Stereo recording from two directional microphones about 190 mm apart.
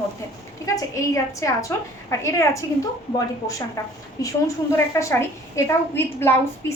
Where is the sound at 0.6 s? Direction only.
15° left (ahead or behind).